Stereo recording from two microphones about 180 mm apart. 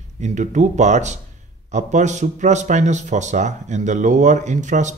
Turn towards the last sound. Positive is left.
turn(degrees=-45)  # may be behind; listen again after turning